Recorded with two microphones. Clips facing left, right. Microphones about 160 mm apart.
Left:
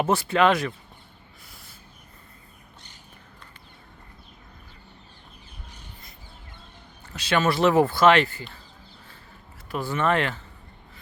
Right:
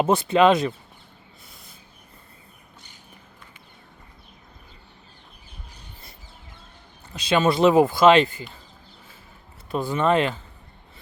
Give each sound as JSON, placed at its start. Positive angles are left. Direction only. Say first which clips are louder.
{"t": 0.0, "sound": "speech", "louder": "right 3 dB", "side_deg": -20}
{"t": 7.1, "sound": "speech", "louder": "right 3 dB", "side_deg": -15}
{"t": 9.7, "sound": "speech", "louder": "right 3 dB", "side_deg": -15}